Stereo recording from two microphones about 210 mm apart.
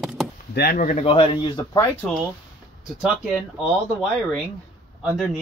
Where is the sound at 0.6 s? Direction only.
45° left (ahead or behind).